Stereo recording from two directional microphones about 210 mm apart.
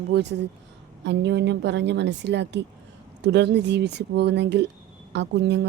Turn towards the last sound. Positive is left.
turn(degrees=-55)  # may be behind; listen again after turning